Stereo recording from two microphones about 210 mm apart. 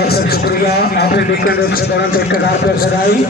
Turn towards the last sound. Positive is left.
turn(degrees=45)  # may be behind; listen again after turning